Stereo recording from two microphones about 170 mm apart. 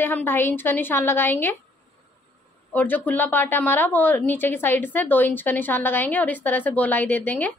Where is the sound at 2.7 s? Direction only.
10° left (ahead or behind).